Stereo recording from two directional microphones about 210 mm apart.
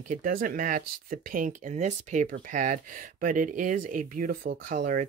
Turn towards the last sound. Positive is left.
turn(degrees=-40)  # may be behind; listen again after turning